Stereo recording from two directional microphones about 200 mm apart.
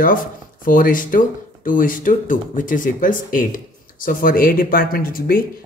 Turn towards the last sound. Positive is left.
turn(degrees=45)  # may be behind; listen again after turning